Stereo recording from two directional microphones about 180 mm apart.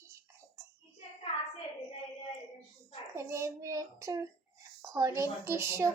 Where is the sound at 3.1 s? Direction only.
15° right (ahead or behind).